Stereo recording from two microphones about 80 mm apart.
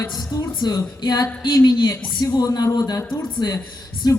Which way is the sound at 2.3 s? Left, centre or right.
Left.